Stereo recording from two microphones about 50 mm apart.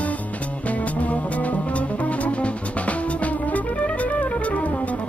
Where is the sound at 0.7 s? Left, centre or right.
Left.